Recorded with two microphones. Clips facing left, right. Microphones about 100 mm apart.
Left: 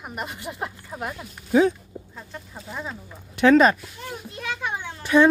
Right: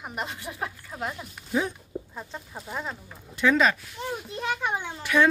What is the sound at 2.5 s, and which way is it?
Speech, 5° right (ahead or behind).